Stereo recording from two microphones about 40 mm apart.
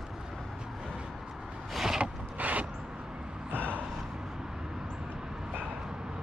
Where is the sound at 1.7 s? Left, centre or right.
Centre.